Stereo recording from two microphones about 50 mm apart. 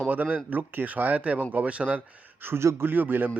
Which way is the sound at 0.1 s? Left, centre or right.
Right.